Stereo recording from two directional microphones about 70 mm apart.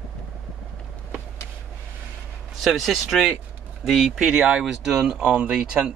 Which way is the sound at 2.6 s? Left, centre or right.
Centre.